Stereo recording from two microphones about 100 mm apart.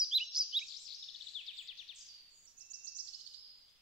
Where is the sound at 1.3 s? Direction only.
10° left (ahead or behind).